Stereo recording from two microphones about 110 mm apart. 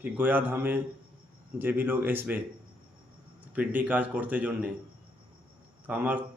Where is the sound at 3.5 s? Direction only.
15° right (ahead or behind).